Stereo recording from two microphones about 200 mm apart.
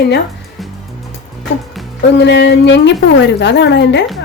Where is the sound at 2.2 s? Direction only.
60° left (ahead or behind).